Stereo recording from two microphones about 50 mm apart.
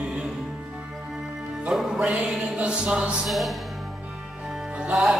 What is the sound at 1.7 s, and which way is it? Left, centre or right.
Music, centre.